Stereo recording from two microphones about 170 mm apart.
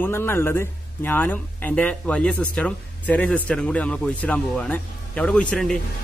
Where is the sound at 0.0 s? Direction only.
15° left (ahead or behind).